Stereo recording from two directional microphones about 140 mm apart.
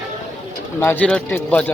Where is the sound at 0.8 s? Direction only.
10° left (ahead or behind).